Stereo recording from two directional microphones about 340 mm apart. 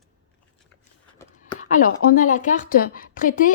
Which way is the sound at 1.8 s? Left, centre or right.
Left.